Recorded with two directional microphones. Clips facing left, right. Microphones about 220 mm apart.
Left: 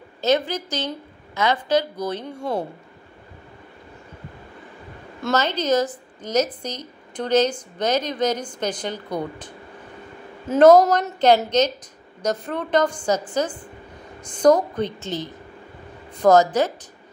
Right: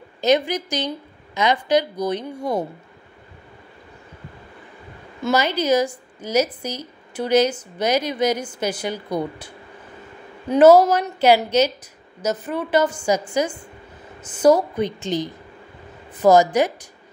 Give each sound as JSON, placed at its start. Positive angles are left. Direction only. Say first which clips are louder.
{"t": 0.2, "sound": "speech", "louder": "right 2 dB", "side_deg": -15}
{"t": 5.3, "sound": "speech", "louder": "right 2 dB", "side_deg": -10}
{"t": 10.5, "sound": "speech", "louder": "right 1 dB", "side_deg": -5}